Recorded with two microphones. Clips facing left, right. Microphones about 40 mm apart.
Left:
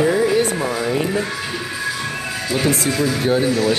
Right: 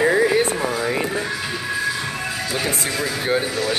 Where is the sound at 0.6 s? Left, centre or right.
Centre.